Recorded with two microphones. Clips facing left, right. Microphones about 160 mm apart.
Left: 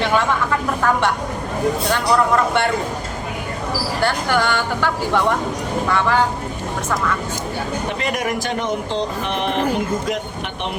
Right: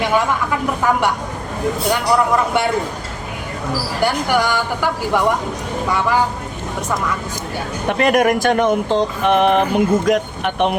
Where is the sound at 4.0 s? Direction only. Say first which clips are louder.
Right 2 dB; 15° right (ahead or behind).